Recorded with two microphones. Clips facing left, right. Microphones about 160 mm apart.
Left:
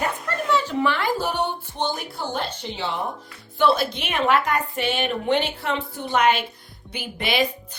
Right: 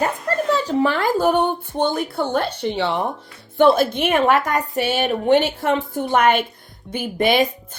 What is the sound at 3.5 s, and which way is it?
A child's voice, 50° right (ahead or behind).